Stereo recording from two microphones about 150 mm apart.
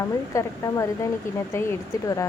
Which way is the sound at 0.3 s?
20° left (ahead or behind).